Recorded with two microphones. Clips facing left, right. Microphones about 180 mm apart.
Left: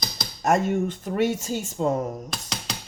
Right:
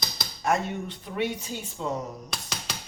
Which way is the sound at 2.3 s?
Centre (ahead or behind).